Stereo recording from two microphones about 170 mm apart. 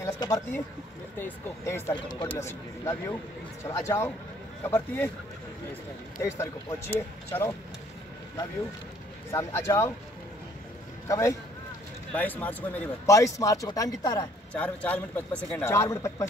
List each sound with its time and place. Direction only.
0.0 s speech: 20° left (ahead or behind)
6.1 s speech: 15° left (ahead or behind)
9.3 s speech: 15° left (ahead or behind)
11.1 s speech: 15° left (ahead or behind)
14.5 s speech: 10° left (ahead or behind)